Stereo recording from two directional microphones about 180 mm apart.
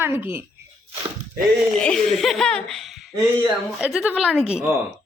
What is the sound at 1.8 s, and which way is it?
Speech, 5° left (ahead or behind).